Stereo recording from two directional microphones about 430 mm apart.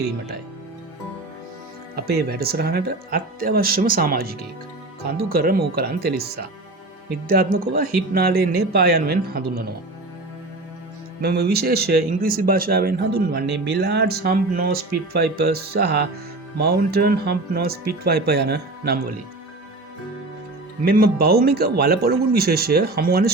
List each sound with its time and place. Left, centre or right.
2.0 s speech: right
11.2 s speech: right
20.8 s speech: right